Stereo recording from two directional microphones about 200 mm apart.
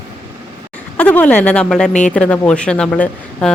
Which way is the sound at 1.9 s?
40° left (ahead or behind).